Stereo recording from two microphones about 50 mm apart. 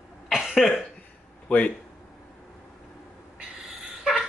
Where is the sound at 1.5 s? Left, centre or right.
Left.